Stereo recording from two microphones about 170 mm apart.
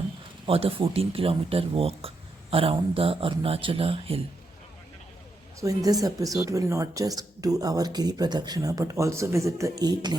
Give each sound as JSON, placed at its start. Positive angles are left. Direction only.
{"t": 0.4, "sound": "speech", "side_deg": -35}
{"t": 5.5, "sound": "speech", "side_deg": -20}